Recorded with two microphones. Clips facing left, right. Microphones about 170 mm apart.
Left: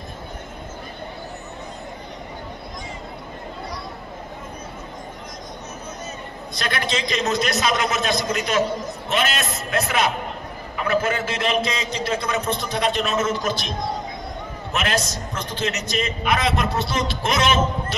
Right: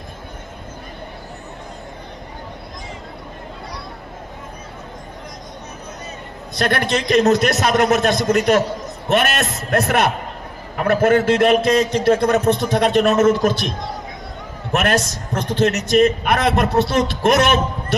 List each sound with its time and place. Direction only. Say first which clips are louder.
6.6 s a man's voice: right 6 dB; 55° right (ahead or behind)
14.7 s a man's voice: right 6 dB; 60° right (ahead or behind)